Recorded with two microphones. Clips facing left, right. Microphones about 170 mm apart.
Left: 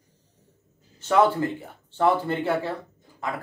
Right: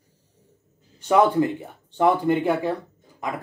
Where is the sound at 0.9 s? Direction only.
15° right (ahead or behind).